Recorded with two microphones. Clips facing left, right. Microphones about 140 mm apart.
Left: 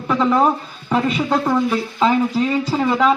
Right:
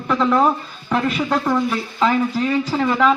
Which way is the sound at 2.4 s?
10° left (ahead or behind).